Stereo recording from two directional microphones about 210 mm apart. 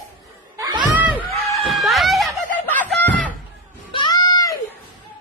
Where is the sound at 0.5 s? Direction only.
20° right (ahead or behind).